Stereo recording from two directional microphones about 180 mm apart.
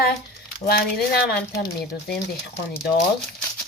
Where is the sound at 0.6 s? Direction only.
55° left (ahead or behind).